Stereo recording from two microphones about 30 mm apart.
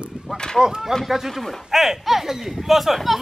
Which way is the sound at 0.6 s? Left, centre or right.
Right.